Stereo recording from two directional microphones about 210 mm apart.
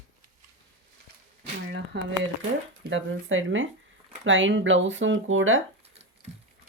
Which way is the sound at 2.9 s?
65° right (ahead or behind).